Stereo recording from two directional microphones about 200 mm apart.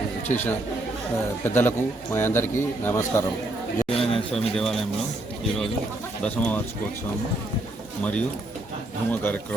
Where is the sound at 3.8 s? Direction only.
30° left (ahead or behind).